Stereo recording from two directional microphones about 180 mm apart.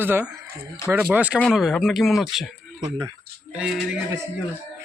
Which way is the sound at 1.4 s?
Centre (ahead or behind).